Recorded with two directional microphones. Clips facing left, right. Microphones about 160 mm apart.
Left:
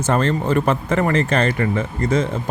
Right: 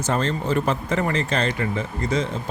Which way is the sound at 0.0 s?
55° left (ahead or behind).